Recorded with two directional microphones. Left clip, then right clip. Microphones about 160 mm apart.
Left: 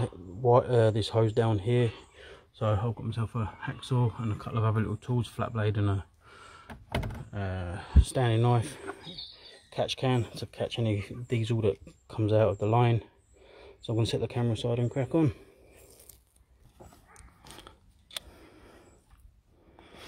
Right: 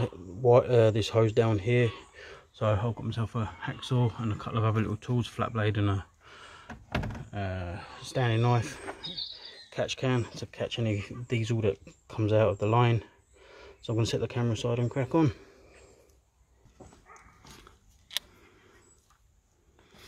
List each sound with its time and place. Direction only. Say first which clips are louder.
0.0 s speech: right 2 dB; centre (ahead or behind)
7.2 s speech: right 1 dB; 15° left (ahead or behind)
8.2 s speech: even; 15° left (ahead or behind)